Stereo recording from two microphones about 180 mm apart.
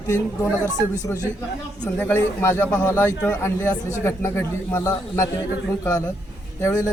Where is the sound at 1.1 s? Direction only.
10° left (ahead or behind).